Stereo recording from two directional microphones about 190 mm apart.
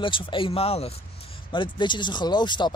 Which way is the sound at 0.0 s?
25° left (ahead or behind).